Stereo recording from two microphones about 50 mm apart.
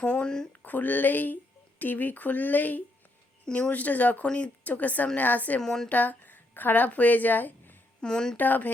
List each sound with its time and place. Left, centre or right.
0.0 s speech: centre
0.6 s speech: left
5.5 s speech: centre
5.9 s speech: left
8.0 s speech: centre
8.4 s speech: left